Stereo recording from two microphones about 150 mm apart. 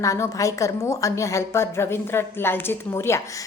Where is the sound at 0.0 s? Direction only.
20° left (ahead or behind).